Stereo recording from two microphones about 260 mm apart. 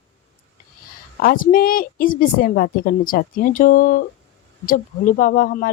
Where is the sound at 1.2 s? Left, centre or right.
Left.